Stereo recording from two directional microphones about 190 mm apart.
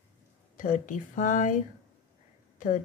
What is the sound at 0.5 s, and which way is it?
Speech, 45° left (ahead or behind).